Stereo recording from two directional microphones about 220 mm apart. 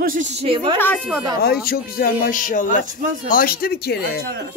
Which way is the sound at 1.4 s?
45° left (ahead or behind).